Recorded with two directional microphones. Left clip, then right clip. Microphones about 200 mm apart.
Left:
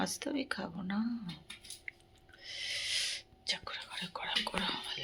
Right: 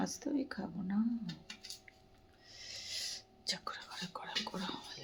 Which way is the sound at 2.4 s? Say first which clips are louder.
Left 10 dB; 5° right (ahead or behind).